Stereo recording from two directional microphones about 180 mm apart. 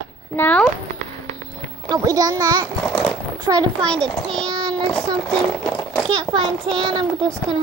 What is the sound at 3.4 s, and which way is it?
Speech, 25° right (ahead or behind).